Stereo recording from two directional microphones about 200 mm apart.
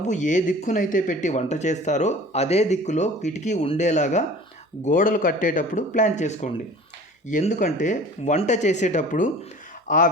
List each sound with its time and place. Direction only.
0.1 s speech: 40° left (ahead or behind)